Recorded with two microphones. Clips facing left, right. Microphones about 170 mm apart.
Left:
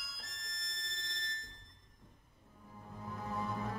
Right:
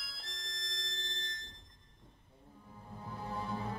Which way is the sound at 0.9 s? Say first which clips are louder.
Right 2 dB; 30° right (ahead or behind).